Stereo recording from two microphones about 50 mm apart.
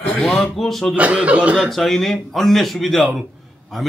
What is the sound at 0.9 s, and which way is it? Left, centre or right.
Speech, right.